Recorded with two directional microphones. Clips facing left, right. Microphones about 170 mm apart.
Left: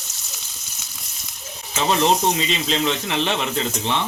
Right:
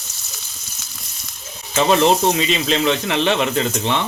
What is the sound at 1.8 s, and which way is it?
Speech, 65° right (ahead or behind).